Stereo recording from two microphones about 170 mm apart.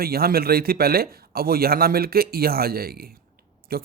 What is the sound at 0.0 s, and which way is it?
A man's voice, 60° right (ahead or behind).